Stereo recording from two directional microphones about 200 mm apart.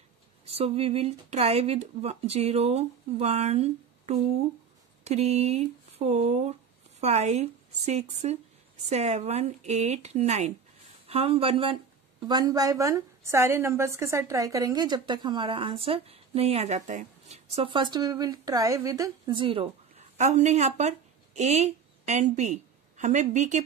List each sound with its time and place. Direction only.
0.5 s a woman's voice: 30° right (ahead or behind)